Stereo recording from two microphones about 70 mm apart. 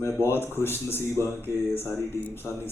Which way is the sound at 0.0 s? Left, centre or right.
Left.